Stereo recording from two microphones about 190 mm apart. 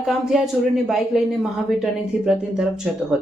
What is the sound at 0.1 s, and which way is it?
Speech, centre (ahead or behind).